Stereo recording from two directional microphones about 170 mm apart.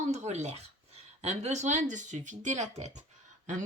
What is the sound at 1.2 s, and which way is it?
Speech, 40° right (ahead or behind).